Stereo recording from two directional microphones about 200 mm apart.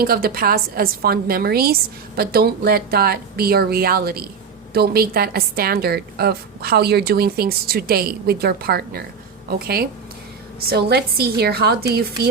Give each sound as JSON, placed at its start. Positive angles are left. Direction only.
{"t": 0.0, "sound": "a woman's voice", "side_deg": -50}